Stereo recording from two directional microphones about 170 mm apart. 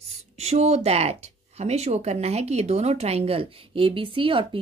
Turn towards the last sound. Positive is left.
turn(degrees=-30)  # may be behind; listen again after turning